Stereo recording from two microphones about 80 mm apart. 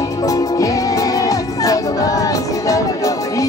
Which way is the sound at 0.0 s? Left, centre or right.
Left.